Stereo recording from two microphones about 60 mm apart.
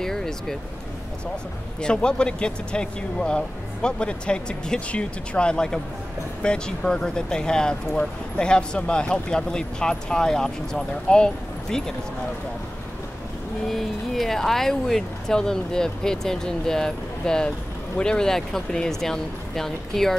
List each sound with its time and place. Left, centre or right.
0.0 s a sound: centre
1.8 s speech: centre
13.7 s speech: centre